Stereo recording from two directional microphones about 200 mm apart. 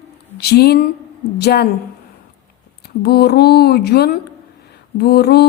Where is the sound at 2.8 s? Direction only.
55° left (ahead or behind).